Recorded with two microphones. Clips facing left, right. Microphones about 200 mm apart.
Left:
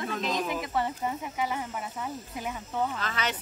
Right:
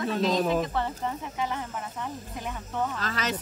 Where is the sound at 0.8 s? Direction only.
10° left (ahead or behind).